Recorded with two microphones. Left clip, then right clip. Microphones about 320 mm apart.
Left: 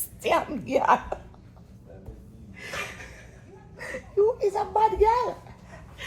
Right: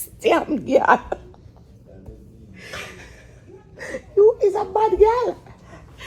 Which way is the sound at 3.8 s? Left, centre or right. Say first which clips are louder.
Right 7 dB; centre.